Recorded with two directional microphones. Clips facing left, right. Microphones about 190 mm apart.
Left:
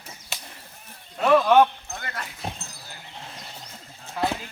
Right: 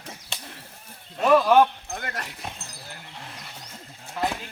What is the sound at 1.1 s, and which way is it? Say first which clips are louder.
Speech: even; 5° right (ahead or behind).